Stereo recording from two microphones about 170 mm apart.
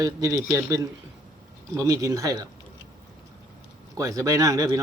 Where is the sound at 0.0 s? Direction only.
20° right (ahead or behind).